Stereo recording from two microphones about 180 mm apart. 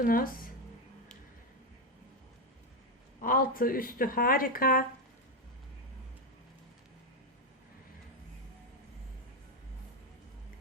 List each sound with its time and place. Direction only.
0.0 s speech: 50° left (ahead or behind)
3.2 s speech: 50° left (ahead or behind)